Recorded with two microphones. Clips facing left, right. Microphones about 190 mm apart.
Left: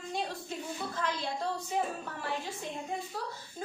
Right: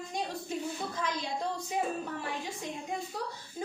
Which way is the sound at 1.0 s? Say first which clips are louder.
Left 1 dB; 15° right (ahead or behind).